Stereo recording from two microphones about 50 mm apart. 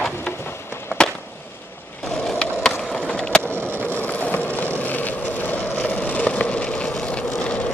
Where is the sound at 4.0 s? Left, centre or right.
Left.